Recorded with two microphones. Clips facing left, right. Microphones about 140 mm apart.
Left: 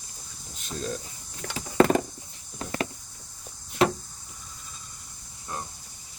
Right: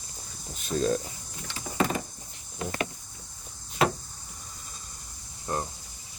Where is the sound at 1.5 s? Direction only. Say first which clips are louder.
Left 7 dB; 70° left (ahead or behind).